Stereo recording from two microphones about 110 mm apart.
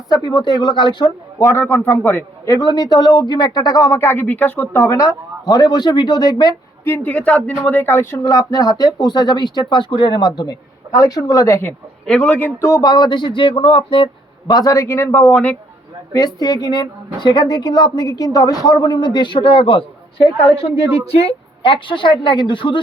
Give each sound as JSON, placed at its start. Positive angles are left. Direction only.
{"t": 0.3, "sound": "a woman's voice", "side_deg": 45}
{"t": 1.4, "sound": "a man's voice", "side_deg": 20}
{"t": 2.5, "sound": "speech", "side_deg": 35}
{"t": 6.8, "sound": "speech", "side_deg": 20}
{"t": 8.3, "sound": "speech", "side_deg": 30}
{"t": 12.0, "sound": "speech", "side_deg": 10}
{"t": 12.8, "sound": "speech", "side_deg": 40}
{"t": 16.1, "sound": "speech", "side_deg": 35}
{"t": 20.6, "sound": "a woman's voice", "side_deg": 65}